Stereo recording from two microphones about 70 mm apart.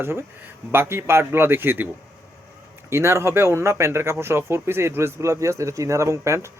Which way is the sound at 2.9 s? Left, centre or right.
Right.